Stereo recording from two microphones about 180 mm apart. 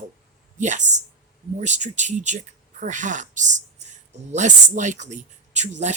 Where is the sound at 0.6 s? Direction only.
40° right (ahead or behind).